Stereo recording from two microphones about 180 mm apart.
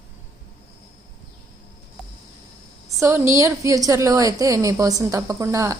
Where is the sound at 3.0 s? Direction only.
15° right (ahead or behind).